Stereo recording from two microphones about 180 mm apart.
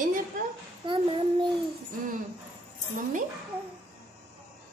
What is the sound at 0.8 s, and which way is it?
Speech, 25° right (ahead or behind).